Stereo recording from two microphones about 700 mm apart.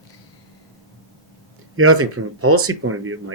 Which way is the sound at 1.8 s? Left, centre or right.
Centre.